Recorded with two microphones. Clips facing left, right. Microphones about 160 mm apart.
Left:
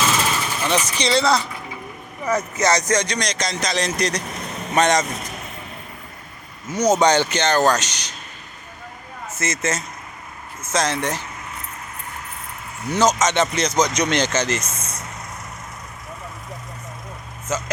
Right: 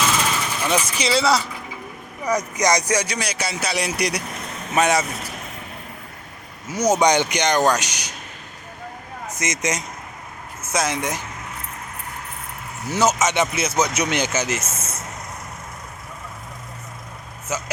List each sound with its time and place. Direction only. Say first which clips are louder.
0.2 s vehicle: left 1 dB; 10° right (ahead or behind)
0.9 s speech: left 1 dB; 5° right (ahead or behind)
2.6 s speech: left 1 dB; 15° right (ahead or behind)
6.7 s speech: left 1 dB; 10° right (ahead or behind)
9.2 s speech: left 1 dB; 15° right (ahead or behind)
12.9 s speech: left 1 dB; 10° right (ahead or behind)
17.5 s speech: left 2 dB; 10° right (ahead or behind)